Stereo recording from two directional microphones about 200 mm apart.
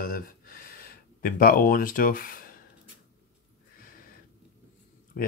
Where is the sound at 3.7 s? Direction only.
45° left (ahead or behind).